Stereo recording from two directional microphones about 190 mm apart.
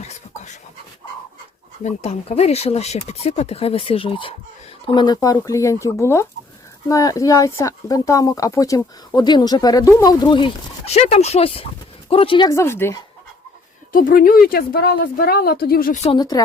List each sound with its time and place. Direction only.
1.8 s speech: 35° left (ahead or behind); by 13.0 s 15° left (ahead or behind)
13.9 s a woman's voice: 45° left (ahead or behind)
16.0 s speech: 20° left (ahead or behind)